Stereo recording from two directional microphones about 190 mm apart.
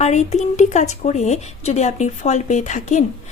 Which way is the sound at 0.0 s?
35° left (ahead or behind).